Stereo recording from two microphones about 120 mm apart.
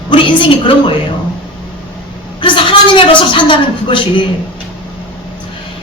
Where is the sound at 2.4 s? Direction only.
45° left (ahead or behind).